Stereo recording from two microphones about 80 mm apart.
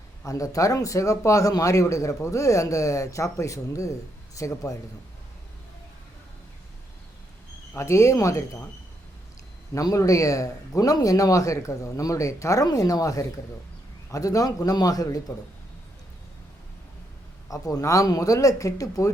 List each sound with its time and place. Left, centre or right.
0.3 s speech: left
7.8 s speech: left
9.7 s speech: left
17.5 s speech: left